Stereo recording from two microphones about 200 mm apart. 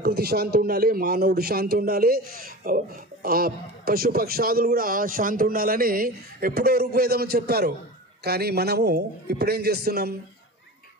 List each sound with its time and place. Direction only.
0.0 s a man's voice: 50° right (ahead or behind)